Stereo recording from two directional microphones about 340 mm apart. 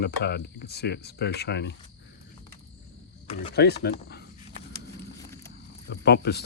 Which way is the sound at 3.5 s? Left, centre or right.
Left.